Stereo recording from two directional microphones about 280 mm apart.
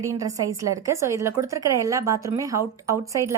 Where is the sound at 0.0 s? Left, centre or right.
Centre.